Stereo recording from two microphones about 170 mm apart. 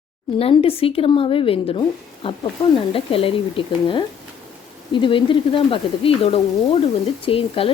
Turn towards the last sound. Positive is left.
turn(degrees=35)  # may be behind; listen again after turning